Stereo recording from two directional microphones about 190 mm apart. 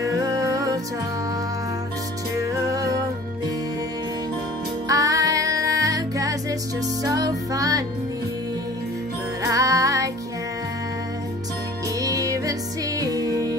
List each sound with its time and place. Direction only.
0.0 s music: 15° right (ahead or behind)
2.5 s music: 20° right (ahead or behind)
4.8 s music: 20° right (ahead or behind)
9.4 s music: 15° right (ahead or behind)
12.0 s music: 15° right (ahead or behind)